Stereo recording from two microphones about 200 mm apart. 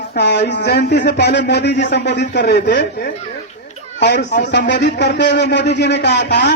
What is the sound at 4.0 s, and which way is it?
Speech, 60° left (ahead or behind).